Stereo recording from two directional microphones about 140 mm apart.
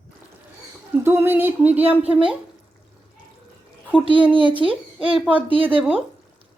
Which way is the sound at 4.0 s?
40° right (ahead or behind).